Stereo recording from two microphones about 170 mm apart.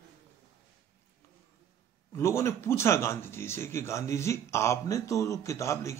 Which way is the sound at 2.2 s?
15° left (ahead or behind).